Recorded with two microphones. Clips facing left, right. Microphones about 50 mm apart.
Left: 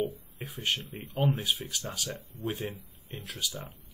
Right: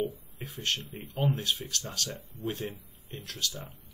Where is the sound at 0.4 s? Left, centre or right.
Centre.